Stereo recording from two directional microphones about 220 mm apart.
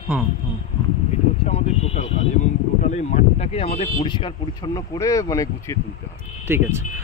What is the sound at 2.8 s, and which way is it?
Speech, 30° left (ahead or behind).